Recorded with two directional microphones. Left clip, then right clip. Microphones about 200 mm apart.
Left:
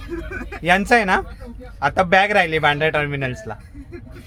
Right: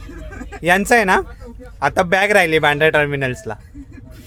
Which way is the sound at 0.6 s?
10° right (ahead or behind).